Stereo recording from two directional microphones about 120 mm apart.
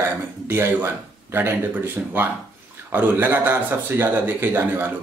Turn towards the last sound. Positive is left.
turn(degrees=-15)  # may be behind; listen again after turning